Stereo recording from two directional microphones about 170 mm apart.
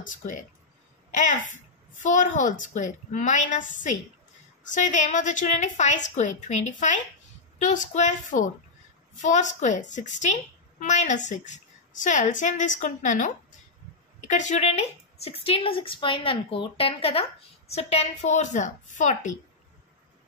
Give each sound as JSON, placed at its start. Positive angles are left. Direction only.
{"t": 0.0, "sound": "a woman's voice", "side_deg": 50}